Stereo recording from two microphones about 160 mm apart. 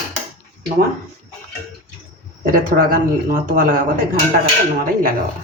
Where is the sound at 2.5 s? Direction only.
60° right (ahead or behind).